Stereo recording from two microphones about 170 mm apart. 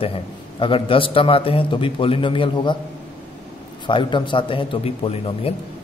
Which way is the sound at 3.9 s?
30° left (ahead or behind).